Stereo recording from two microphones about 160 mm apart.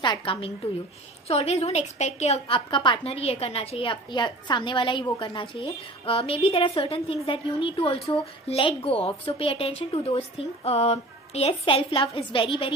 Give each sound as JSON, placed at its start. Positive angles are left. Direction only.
{"t": 0.0, "sound": "a woman's voice", "side_deg": 30}